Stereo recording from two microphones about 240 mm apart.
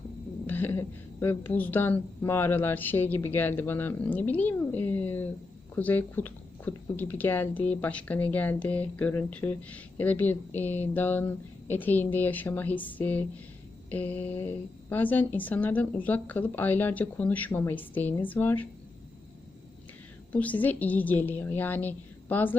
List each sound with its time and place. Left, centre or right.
0.4 s speech: centre
20.3 s speech: centre